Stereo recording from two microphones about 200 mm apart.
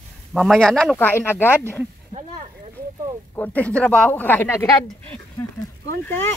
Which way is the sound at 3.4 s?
5° left (ahead or behind).